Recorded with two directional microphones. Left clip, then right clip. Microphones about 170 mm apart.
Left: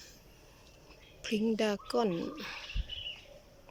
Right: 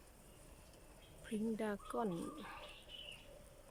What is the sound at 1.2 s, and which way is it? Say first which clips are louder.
Speech: left 11 dB; 15° left (ahead or behind).